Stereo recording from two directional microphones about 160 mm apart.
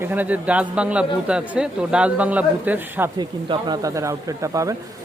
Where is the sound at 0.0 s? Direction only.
10° right (ahead or behind).